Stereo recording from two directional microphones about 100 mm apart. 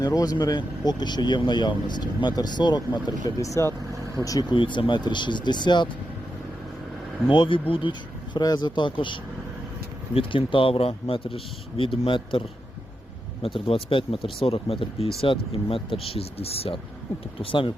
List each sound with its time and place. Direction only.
0.0 s speech: 40° left (ahead or behind)
4.5 s speech: 55° left (ahead or behind)
7.3 s speech: 60° left (ahead or behind)
10.2 s speech: 60° left (ahead or behind)
13.4 s speech: 65° left (ahead or behind)
17.4 s speech: 60° left (ahead or behind)